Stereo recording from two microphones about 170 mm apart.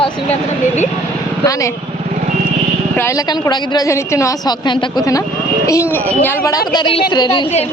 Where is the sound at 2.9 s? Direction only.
15° left (ahead or behind).